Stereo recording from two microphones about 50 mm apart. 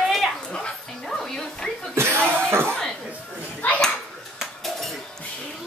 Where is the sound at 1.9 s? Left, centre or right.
Right.